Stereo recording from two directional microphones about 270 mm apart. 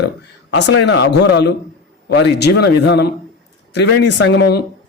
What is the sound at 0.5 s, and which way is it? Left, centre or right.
Speech, left.